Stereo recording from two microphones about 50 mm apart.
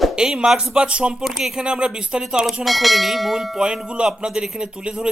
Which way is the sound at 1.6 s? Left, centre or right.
Centre.